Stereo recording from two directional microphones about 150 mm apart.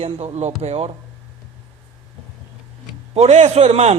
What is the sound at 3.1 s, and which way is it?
Speech, 45° right (ahead or behind).